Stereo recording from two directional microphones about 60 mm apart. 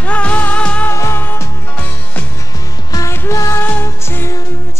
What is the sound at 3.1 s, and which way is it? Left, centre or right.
Music, left.